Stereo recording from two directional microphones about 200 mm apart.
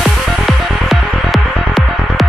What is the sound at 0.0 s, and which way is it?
Music, centre (ahead or behind).